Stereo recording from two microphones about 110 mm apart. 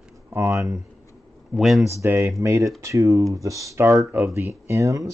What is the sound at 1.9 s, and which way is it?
Speech, 20° right (ahead or behind).